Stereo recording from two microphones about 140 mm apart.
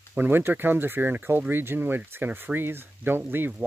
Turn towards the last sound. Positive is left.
turn(degrees=-10)  # may be behind; listen again after turning